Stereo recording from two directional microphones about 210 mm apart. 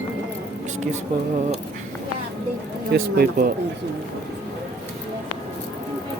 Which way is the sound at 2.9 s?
50° right (ahead or behind).